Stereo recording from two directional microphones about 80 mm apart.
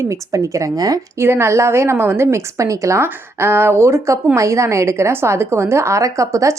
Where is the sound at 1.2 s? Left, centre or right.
Right.